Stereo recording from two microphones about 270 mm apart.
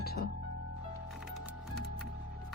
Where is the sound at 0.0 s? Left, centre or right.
Left.